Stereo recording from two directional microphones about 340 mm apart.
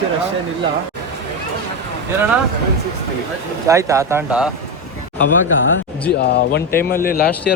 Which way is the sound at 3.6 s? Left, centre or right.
Centre.